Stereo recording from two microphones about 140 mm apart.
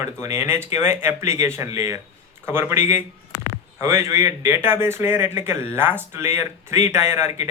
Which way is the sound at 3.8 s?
20° right (ahead or behind).